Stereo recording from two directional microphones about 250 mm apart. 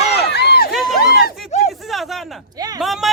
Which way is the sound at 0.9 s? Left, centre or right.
Left.